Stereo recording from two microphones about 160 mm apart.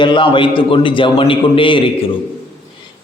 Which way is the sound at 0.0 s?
30° left (ahead or behind).